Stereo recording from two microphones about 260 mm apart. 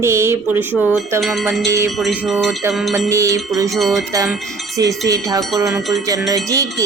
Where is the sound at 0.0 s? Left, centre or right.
Centre.